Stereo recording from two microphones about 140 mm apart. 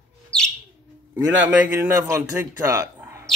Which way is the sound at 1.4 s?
10° right (ahead or behind).